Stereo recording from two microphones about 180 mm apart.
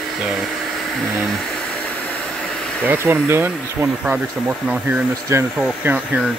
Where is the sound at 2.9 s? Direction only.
10° right (ahead or behind).